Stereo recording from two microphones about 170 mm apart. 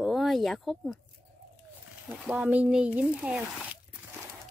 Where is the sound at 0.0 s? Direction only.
Centre (ahead or behind).